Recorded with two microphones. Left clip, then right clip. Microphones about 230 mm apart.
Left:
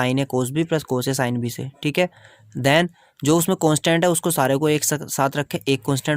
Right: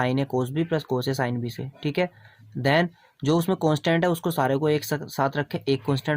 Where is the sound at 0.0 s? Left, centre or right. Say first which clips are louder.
Left 3 dB; left.